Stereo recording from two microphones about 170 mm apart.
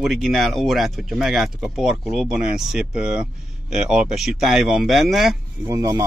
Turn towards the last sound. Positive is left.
turn(degrees=-20)  # may be behind; listen again after turning